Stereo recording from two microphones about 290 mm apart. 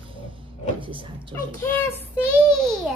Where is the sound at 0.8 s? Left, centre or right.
Centre.